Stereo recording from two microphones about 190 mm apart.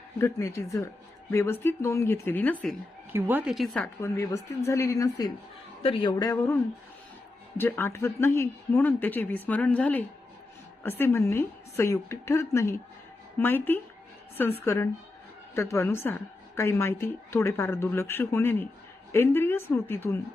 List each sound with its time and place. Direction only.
0.2 s speech: 15° left (ahead or behind)
3.1 s a woman's voice: 10° right (ahead or behind)
4.0 s speech: 15° left (ahead or behind)